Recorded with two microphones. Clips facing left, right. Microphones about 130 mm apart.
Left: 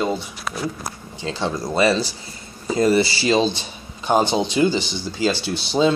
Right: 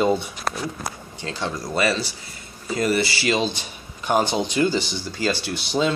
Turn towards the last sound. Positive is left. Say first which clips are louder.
# left 4 dB
turn(degrees=30)  # may be behind; listen again after turning